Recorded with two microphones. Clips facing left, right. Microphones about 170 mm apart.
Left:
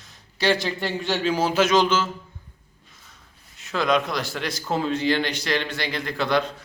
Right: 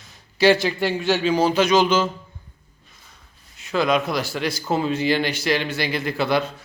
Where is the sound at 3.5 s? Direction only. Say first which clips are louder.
Right 2 dB; centre (ahead or behind).